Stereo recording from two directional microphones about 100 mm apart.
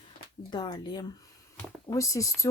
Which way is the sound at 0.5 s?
50° left (ahead or behind).